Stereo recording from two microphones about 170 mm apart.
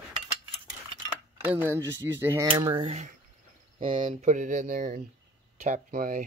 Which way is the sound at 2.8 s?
40° right (ahead or behind).